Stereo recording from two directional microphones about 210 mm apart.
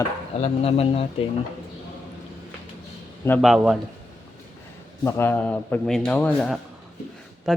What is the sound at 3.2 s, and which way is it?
Speech, centre (ahead or behind).